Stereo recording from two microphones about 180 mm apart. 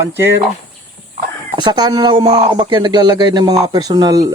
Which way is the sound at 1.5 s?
25° right (ahead or behind).